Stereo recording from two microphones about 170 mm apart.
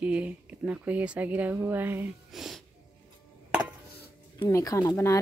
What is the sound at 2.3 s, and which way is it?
Wheeze, centre (ahead or behind).